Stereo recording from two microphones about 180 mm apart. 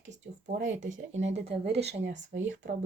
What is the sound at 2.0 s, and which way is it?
Speech, 80° right.